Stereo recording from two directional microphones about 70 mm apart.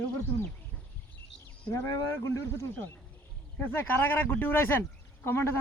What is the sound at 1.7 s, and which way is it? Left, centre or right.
Speech, left.